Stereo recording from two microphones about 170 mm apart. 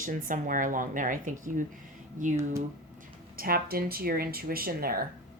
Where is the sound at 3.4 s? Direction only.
60° right (ahead or behind).